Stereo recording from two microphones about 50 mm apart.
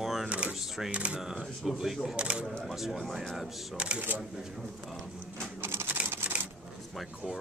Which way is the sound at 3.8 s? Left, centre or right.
Right.